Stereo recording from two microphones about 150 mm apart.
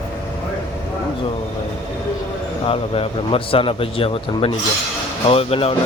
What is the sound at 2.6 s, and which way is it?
Speech, 40° left (ahead or behind).